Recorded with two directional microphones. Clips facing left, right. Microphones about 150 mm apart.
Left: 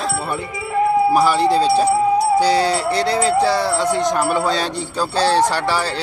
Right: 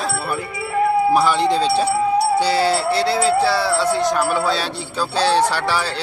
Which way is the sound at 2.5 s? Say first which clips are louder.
Left 1 dB; 5° right (ahead or behind).